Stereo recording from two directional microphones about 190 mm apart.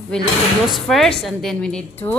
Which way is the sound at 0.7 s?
Centre (ahead or behind).